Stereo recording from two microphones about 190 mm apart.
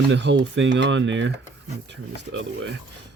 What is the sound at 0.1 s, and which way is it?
Speech, 70° right (ahead or behind).